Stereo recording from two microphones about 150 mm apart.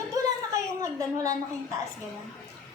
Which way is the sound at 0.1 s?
20° right (ahead or behind).